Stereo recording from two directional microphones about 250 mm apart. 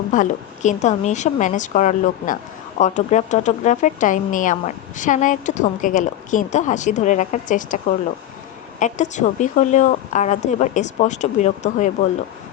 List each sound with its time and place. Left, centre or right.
0.1 s a woman's voice: left